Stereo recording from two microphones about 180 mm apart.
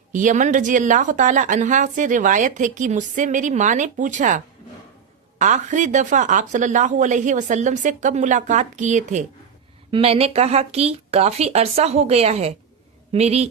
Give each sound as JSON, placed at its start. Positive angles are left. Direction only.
{"t": 0.1, "sound": "a woman's voice", "side_deg": -45}